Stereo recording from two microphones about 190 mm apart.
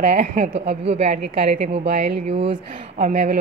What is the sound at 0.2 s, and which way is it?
A woman's voice, 40° right (ahead or behind).